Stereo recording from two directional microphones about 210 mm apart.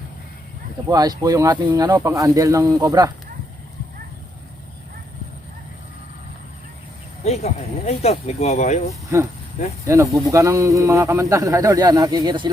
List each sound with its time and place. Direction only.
0.9 s a man's voice: 20° right (ahead or behind)
7.3 s speech: 30° left (ahead or behind)
9.1 s a man's voice: 15° right (ahead or behind)